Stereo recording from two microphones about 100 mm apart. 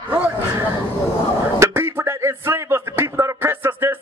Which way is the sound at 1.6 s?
25° right (ahead or behind).